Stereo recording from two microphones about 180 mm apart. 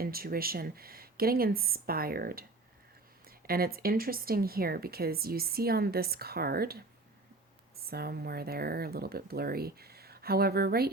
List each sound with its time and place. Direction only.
0.0 s speech: 55° right (ahead or behind)